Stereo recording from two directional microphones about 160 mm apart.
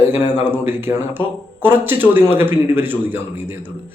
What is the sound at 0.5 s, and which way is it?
Speech, 15° right (ahead or behind).